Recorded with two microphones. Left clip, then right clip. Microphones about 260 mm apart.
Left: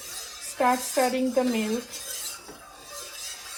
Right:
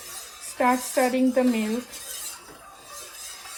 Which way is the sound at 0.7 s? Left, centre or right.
Right.